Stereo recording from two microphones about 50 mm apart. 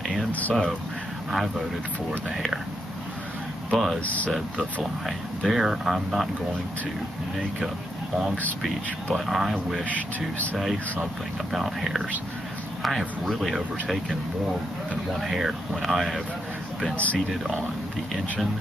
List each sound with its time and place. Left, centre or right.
0.3 s speech: left
2.3 s speech: centre
3.7 s speech: centre
4.0 s speech: left
5.0 s speech: centre
9.1 s speech: centre
9.8 s speech: left
11.5 s speech: centre
15.1 s speech: centre
16.9 s speech: left